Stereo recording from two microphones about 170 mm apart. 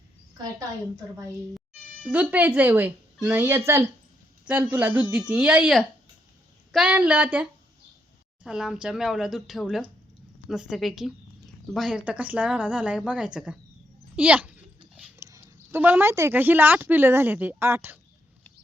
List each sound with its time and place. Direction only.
2.0 s a woman's voice: 10° right (ahead or behind)
8.4 s a woman's voice: centre (ahead or behind)